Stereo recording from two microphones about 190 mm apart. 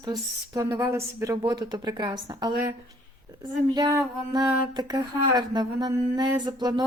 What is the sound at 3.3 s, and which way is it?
Speech, 20° right (ahead or behind).